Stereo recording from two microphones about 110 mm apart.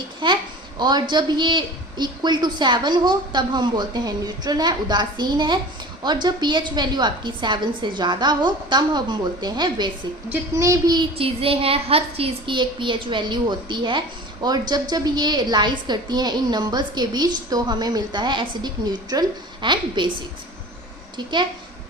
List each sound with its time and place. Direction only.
0.2 s a child's voice: 45° right (ahead or behind)
10.5 s a woman's voice: 30° right (ahead or behind)
11.2 s a woman's voice: 60° right (ahead or behind)